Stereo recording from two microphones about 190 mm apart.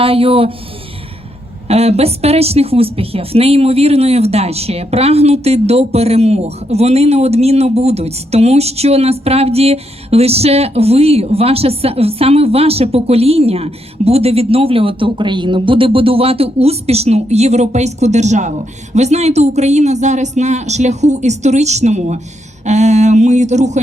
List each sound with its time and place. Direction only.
0.0 s speech: 30° right (ahead or behind)
1.6 s speech: 35° right (ahead or behind)